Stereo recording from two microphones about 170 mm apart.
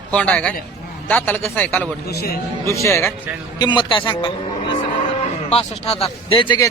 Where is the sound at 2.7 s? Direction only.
15° left (ahead or behind).